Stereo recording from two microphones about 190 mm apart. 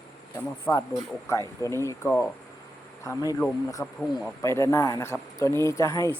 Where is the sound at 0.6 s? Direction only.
15° left (ahead or behind).